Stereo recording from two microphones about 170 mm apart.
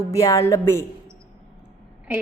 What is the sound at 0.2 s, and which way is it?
Speech, 20° left (ahead or behind).